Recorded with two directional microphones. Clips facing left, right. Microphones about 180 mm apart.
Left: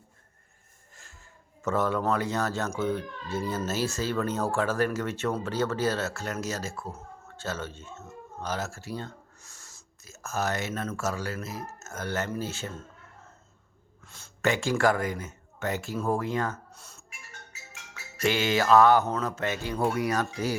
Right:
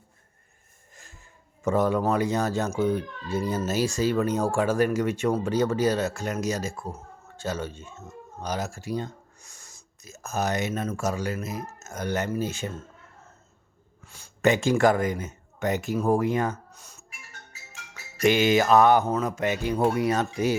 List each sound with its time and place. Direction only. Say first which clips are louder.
1.6 s speech: right 4 dB; 15° right (ahead or behind)
14.0 s speech: right 5 dB; 10° right (ahead or behind)
17.7 s speech: right 3 dB; 15° right (ahead or behind)